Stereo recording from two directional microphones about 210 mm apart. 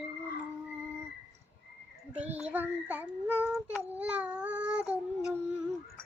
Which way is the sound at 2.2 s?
5° right (ahead or behind).